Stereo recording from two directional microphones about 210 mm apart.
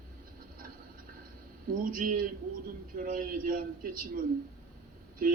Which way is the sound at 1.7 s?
40° right (ahead or behind).